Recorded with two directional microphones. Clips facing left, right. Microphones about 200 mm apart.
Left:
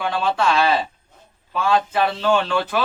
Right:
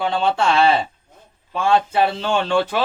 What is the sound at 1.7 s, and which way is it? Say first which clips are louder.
Speech: right 2 dB; 25° right (ahead or behind).